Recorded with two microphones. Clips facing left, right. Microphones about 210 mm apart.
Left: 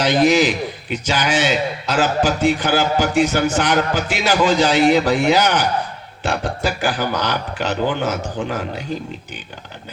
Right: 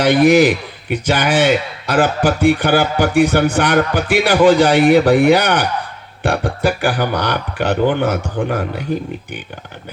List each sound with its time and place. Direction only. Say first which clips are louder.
0.0 s a man's voice: right 4 dB; 60° right (ahead or behind)